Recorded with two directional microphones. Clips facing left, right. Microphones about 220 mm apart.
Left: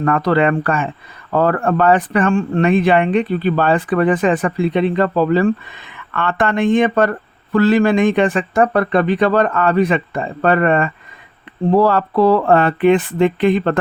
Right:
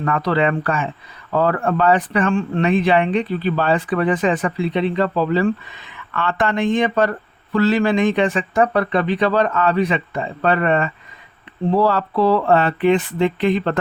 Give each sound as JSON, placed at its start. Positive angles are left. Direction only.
{"t": 0.0, "sound": "speech", "side_deg": 50}